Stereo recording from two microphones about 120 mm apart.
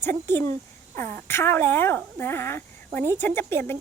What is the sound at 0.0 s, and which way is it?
Speech, 20° left (ahead or behind).